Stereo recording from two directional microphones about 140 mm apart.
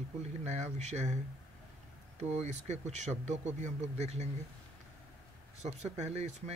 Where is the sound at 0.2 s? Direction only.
50° right (ahead or behind).